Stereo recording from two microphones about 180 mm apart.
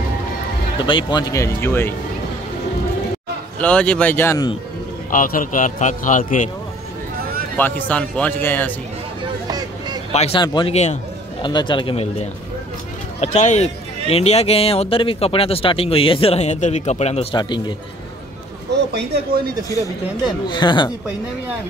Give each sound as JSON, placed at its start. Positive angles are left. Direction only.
{"t": 0.7, "sound": "speech", "side_deg": 25}
{"t": 3.5, "sound": "speech", "side_deg": 5}
{"t": 5.1, "sound": "a man's voice", "side_deg": 50}
{"t": 7.5, "sound": "speech", "side_deg": 10}
{"t": 9.5, "sound": "vehicle", "side_deg": -20}
{"t": 10.1, "sound": "speech", "side_deg": 35}
{"t": 10.4, "sound": "speech", "side_deg": 25}
{"t": 10.7, "sound": "speech", "side_deg": 40}
{"t": 11.4, "sound": "speech", "side_deg": 25}
{"t": 13.2, "sound": "speech", "side_deg": 40}
{"t": 18.9, "sound": "speech", "side_deg": -65}
{"t": 20.4, "sound": "speech", "side_deg": 25}